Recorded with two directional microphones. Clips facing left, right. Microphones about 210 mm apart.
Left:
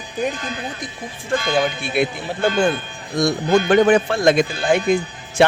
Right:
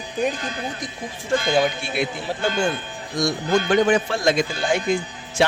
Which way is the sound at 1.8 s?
55° left (ahead or behind).